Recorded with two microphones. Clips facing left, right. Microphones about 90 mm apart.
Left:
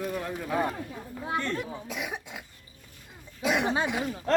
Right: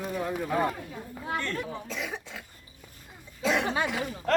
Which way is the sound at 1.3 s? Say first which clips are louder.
Left 1 dB; 20° left (ahead or behind).